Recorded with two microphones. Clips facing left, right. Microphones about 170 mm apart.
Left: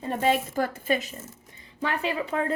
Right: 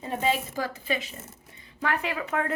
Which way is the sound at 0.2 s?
55° left (ahead or behind).